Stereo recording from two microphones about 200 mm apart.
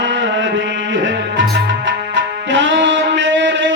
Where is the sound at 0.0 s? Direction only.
65° right (ahead or behind).